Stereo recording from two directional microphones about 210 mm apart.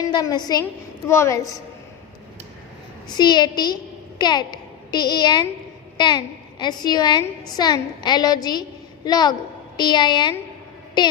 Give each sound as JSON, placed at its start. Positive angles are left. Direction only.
{"t": 0.0, "sound": "a woman's voice", "side_deg": 20}
{"t": 3.2, "sound": "a woman's voice", "side_deg": 20}